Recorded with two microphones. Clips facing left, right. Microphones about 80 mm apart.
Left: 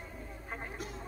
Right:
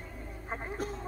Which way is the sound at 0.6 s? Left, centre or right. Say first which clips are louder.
Right 9 dB; right.